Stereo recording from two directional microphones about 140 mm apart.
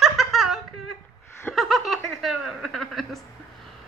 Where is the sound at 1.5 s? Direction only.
Centre (ahead or behind).